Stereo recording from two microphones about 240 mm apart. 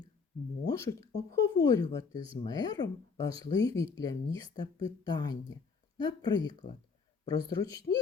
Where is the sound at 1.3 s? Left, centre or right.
Centre.